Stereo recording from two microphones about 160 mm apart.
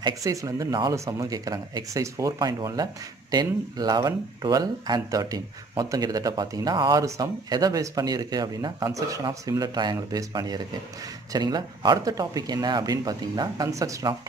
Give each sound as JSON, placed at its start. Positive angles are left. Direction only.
{"t": 0.0, "sound": "speech", "side_deg": -20}